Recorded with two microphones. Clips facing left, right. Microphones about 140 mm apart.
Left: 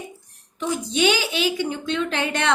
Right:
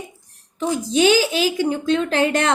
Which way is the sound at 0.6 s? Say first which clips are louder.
Right 4 dB; 35° right (ahead or behind).